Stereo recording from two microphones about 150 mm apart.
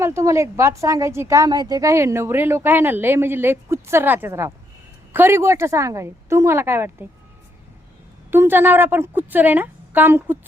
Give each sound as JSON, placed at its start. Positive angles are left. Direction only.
{"t": 0.0, "sound": "a woman's voice", "side_deg": -20}
{"t": 8.3, "sound": "a woman's voice", "side_deg": -15}